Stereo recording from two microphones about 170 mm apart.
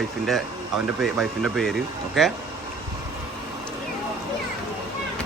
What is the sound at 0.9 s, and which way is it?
Speech, centre (ahead or behind).